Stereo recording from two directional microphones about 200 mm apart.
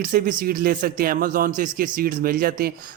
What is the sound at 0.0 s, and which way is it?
Speech, 45° right (ahead or behind).